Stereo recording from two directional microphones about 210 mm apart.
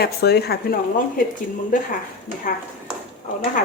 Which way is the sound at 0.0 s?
50° left (ahead or behind).